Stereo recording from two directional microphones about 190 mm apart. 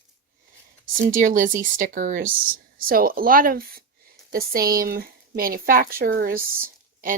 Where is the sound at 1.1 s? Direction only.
45° right (ahead or behind).